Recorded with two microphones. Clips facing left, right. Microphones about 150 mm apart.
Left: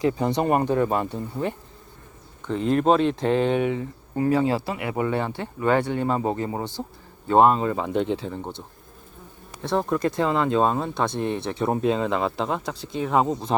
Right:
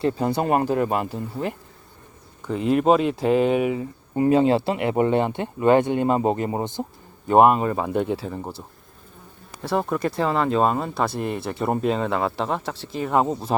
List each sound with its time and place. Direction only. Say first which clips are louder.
0.0 s speech: even; 5° right (ahead or behind)
4.1 s speech: right 4 dB; 20° right (ahead or behind); by 13.6 s 5° right (ahead or behind)